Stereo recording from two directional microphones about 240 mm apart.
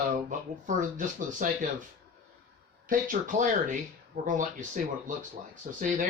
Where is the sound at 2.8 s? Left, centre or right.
Right.